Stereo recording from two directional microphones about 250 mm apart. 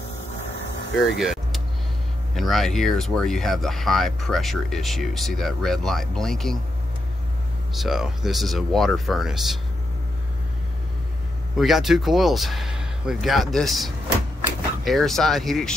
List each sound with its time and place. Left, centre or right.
1.0 s speech: centre
7.7 s speech: centre
11.5 s speech: centre